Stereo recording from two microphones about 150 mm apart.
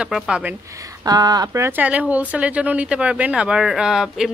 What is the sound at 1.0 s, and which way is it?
Speech, 25° right (ahead or behind).